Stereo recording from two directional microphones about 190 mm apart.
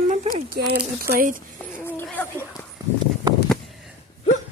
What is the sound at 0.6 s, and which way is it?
Speech, 55° right (ahead or behind).